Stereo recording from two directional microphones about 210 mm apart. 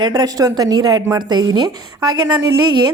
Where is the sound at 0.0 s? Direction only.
20° right (ahead or behind).